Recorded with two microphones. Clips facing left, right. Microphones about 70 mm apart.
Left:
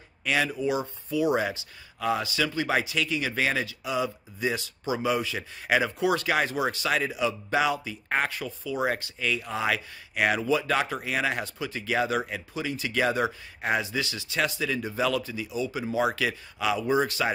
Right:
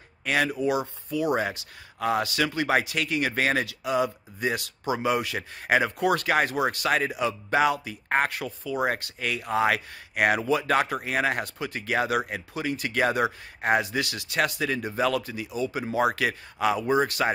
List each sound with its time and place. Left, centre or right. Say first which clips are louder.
0.2 s speech: right 2 dB; right
10.4 s speech: even; right
10.7 s speech: right 2 dB; right
16.5 s speech: right 2 dB; right